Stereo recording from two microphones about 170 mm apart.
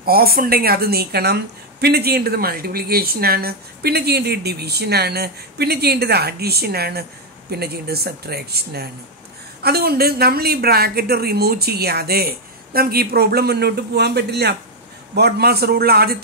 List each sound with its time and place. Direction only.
0.0 s a woman's voice: 60° right (ahead or behind)